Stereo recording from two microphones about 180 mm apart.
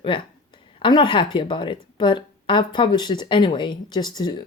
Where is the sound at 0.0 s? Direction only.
30° left (ahead or behind).